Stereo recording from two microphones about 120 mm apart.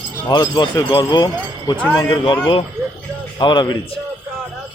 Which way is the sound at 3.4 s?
40° left (ahead or behind).